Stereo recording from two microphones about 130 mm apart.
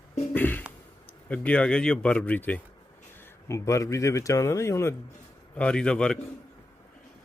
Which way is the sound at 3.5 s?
25° left (ahead or behind).